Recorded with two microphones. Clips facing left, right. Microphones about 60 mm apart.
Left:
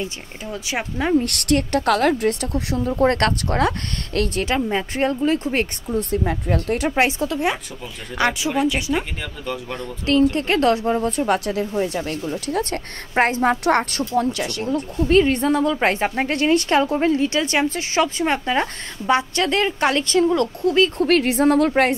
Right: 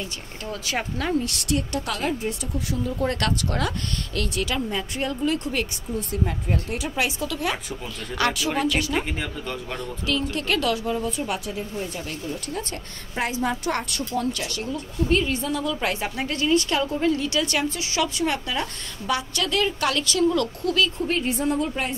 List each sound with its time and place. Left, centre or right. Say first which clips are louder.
0.5 s speech: left 2 dB; centre
1.2 s a woman's voice: left 6 dB; left
2.8 s a woman's voice: left 8 dB; left
5.9 s a woman's voice: left 6 dB; left
7.0 s a woman's voice: left 4 dB; left
10.3 s a woman's voice: left 6 dB; left
21.0 s a woman's voice: left 8 dB; left